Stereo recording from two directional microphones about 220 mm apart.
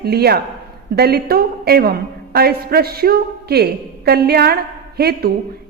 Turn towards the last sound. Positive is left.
turn(degrees=-45)  # may be behind; listen again after turning